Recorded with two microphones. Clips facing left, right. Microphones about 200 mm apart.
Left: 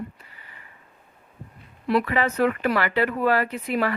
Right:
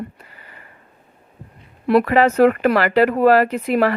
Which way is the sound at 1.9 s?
55° right (ahead or behind).